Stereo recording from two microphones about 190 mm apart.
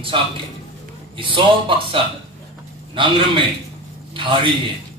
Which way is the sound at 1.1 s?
25° right (ahead or behind).